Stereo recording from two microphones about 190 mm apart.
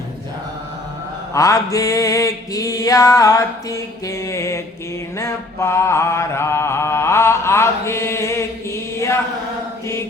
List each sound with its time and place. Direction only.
1.3 s mantra: 15° left (ahead or behind)
9.0 s chant: 15° left (ahead or behind)